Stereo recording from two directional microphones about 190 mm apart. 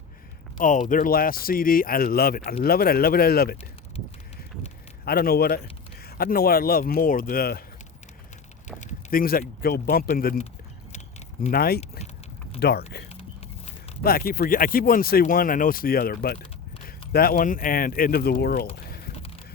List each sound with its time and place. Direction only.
0.9 s speech: 45° left (ahead or behind)
5.0 s a man's voice: 55° left (ahead or behind)
8.6 s a sound: 40° left (ahead or behind)
9.6 s speech: 55° left (ahead or behind)
11.5 s speech: 55° left (ahead or behind)
14.0 s speech: 50° left (ahead or behind)